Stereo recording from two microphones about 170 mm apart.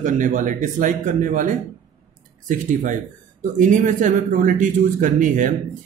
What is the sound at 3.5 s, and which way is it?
Speech, 50° right (ahead or behind).